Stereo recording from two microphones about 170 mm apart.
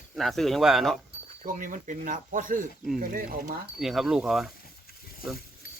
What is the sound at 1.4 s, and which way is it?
Speech, 50° right (ahead or behind).